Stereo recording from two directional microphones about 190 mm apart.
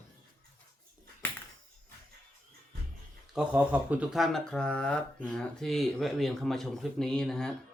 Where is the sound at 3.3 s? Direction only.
10° right (ahead or behind).